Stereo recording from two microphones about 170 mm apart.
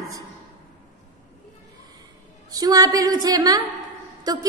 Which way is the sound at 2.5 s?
20° right (ahead or behind).